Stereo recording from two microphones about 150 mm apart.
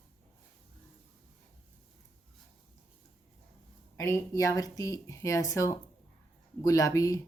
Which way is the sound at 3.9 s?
20° left (ahead or behind).